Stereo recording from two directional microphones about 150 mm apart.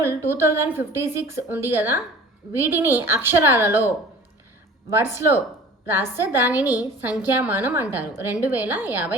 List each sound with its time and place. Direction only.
0.0 s a woman's voice: 15° right (ahead or behind)